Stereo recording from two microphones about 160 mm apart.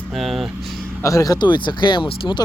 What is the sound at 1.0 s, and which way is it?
Speech, 20° left (ahead or behind).